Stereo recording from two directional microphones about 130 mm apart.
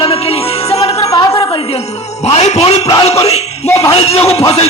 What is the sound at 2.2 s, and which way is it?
Speech, 55° left (ahead or behind).